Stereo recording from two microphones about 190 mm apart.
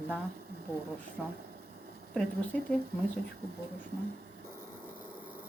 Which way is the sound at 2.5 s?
5° left (ahead or behind).